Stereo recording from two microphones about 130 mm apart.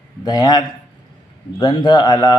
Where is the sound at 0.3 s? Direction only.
30° left (ahead or behind).